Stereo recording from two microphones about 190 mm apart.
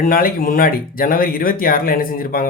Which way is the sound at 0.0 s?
50° left (ahead or behind).